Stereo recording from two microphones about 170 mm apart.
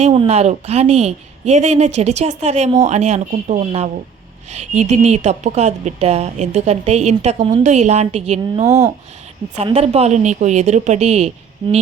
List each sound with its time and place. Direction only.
0.0 s a woman's voice: 35° right (ahead or behind)
8.6 s speech: 15° right (ahead or behind)
9.6 s a woman's voice: 35° right (ahead or behind)